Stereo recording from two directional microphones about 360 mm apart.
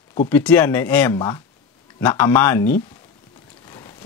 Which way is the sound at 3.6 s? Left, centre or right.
Centre.